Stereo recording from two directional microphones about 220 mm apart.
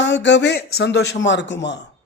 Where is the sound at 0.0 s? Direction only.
55° left (ahead or behind).